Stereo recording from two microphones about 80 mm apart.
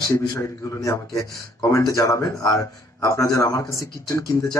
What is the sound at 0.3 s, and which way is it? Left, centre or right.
A man's voice, left.